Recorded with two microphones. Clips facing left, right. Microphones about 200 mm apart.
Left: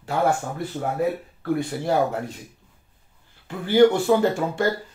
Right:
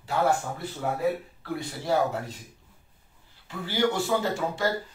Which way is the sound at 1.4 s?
55° left (ahead or behind).